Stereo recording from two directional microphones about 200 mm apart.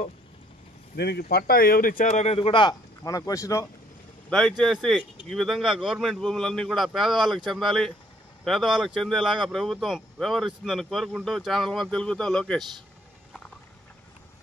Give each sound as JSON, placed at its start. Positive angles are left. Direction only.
{"t": 0.9, "sound": "a man's voice", "side_deg": 55}
{"t": 4.3, "sound": "speech", "side_deg": 0}